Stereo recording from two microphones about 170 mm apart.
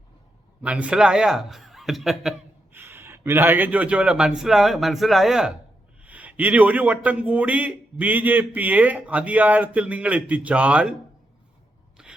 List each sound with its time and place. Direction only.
0.6 s a man's voice: 5° right (ahead or behind)
2.7 s a man's voice: 15° right (ahead or behind)
12.0 s a sound: 5° right (ahead or behind)